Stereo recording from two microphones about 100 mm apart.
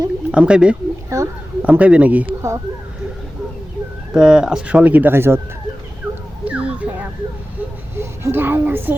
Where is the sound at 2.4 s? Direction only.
30° right (ahead or behind).